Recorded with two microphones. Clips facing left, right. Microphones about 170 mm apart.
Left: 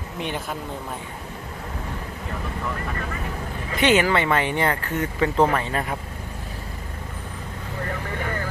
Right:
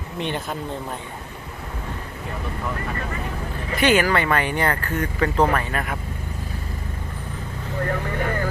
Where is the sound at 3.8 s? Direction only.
20° left (ahead or behind).